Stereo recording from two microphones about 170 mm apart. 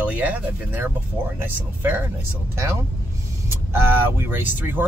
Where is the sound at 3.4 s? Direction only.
15° right (ahead or behind).